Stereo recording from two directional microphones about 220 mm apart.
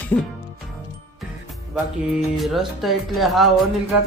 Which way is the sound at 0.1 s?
15° left (ahead or behind).